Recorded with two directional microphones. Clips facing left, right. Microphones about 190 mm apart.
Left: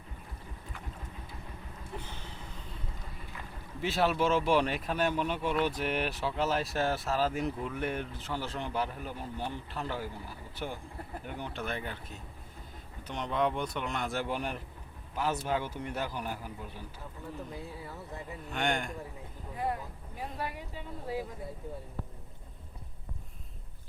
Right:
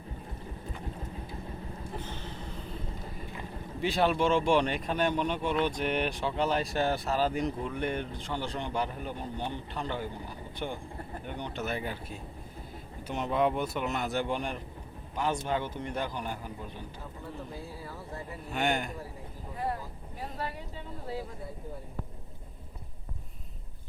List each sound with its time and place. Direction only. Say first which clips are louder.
3.8 s speech: right 2 dB; centre (ahead or behind)
11.6 s a man's voice: right 5 dB; 10° right (ahead or behind); by 16.8 s 5° left (ahead or behind)
17.5 s speech: right 1 dB; 20° left (ahead or behind)
18.5 s speech: right 2 dB; 5° right (ahead or behind)
19.5 s speech: even; 15° left (ahead or behind)